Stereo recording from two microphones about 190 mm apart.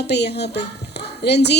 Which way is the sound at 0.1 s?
60° left (ahead or behind).